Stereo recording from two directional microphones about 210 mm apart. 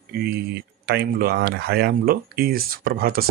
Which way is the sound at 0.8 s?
45° right (ahead or behind).